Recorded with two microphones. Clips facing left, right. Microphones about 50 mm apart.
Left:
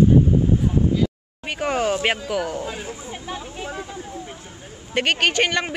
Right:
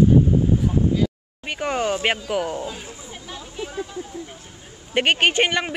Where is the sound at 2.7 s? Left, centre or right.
Left.